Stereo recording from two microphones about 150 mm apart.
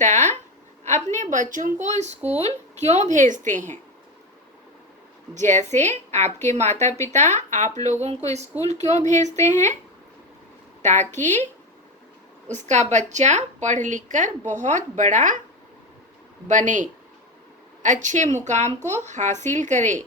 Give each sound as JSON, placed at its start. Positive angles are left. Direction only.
{"t": 0.0, "sound": "speech", "side_deg": -55}
{"t": 5.3, "sound": "speech", "side_deg": -55}
{"t": 10.8, "sound": "speech", "side_deg": -50}
{"t": 12.5, "sound": "a woman's voice", "side_deg": -55}
{"t": 16.5, "sound": "a woman's voice", "side_deg": -55}